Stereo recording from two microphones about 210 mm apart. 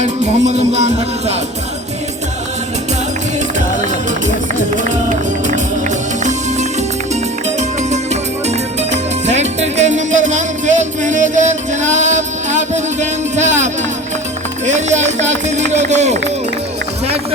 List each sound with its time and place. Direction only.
0.0 s speech: 35° right (ahead or behind)
7.8 s music: 35° right (ahead or behind)
14.7 s speech: 35° right (ahead or behind)